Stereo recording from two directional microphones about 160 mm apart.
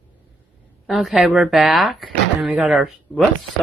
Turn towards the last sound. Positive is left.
turn(degrees=0)  # may be behind; listen again after turning